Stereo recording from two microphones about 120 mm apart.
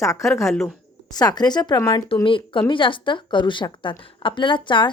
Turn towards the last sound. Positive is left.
turn(degrees=40)  # may be behind; listen again after turning